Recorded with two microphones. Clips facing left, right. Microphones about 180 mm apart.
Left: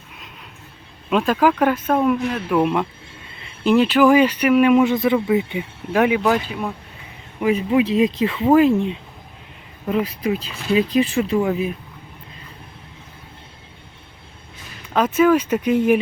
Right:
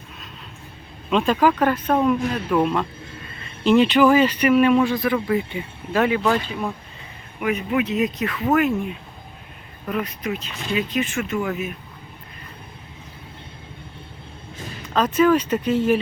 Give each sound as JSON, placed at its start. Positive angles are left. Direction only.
{"t": 1.1, "sound": "speech", "side_deg": 5}
{"t": 7.3, "sound": "speech", "side_deg": 30}
{"t": 14.9, "sound": "speech", "side_deg": 10}